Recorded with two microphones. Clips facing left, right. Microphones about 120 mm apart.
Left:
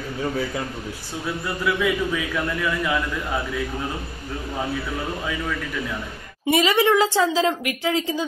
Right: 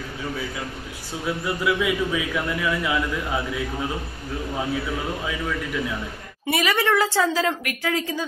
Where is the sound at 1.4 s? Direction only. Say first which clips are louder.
Even; 10° right (ahead or behind).